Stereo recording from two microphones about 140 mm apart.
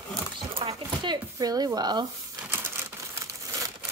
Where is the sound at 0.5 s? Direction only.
40° right (ahead or behind).